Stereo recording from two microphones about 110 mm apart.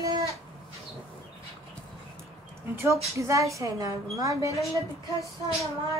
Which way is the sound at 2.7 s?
25° right (ahead or behind).